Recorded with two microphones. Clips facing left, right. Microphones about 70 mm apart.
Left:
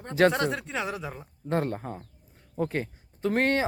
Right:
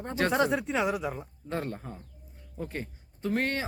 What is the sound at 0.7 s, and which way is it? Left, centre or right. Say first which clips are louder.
Speech: right 4 dB; centre.